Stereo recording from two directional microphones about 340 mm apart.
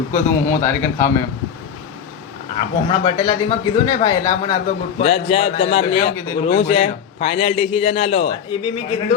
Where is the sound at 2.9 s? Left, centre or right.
Centre.